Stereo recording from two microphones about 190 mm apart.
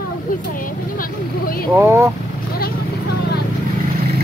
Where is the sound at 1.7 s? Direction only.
15° right (ahead or behind).